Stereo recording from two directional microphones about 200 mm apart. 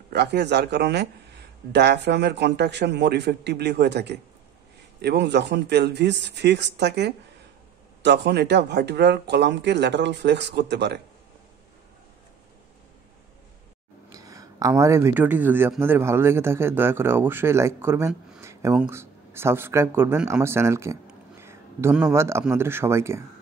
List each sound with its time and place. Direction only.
0.1 s speech: 55° right (ahead or behind)
14.1 s a man's voice: 15° right (ahead or behind)